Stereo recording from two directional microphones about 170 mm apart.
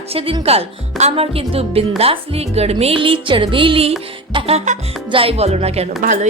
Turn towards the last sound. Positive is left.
turn(degrees=-45)  # may be behind; listen again after turning